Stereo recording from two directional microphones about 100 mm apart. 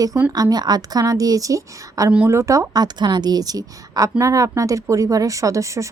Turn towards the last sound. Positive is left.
turn(degrees=-30)  # may be behind; listen again after turning